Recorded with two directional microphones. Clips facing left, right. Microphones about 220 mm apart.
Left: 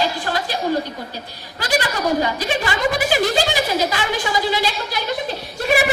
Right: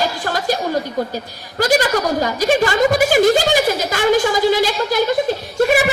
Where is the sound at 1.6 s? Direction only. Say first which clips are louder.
Right 5 dB; 45° right (ahead or behind).